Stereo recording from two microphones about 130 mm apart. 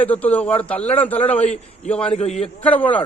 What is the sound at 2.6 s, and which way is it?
Speech, 10° left (ahead or behind).